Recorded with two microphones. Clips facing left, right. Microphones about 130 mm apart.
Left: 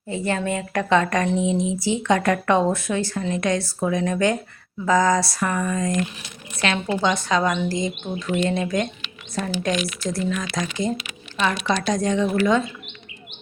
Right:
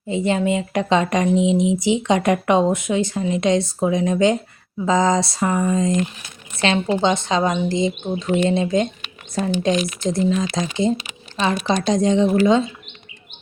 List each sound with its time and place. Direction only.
0.1 s speech: 20° right (ahead or behind)